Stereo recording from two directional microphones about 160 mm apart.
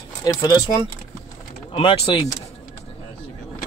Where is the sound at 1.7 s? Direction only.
35° left (ahead or behind).